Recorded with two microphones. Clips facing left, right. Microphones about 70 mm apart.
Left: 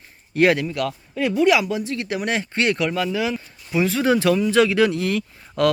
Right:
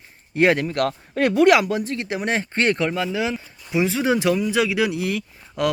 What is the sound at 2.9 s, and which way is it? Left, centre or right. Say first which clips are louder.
Speech: left 1 dB; right.